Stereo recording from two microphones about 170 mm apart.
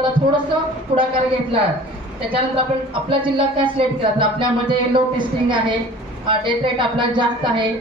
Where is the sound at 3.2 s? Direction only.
30° right (ahead or behind).